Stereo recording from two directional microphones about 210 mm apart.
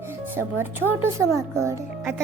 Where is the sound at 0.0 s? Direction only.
10° right (ahead or behind).